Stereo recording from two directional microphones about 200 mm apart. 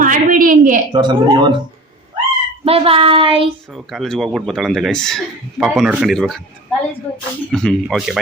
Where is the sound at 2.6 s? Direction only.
30° right (ahead or behind).